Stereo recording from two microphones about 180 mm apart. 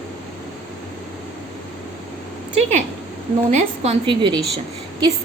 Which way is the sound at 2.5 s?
35° right (ahead or behind).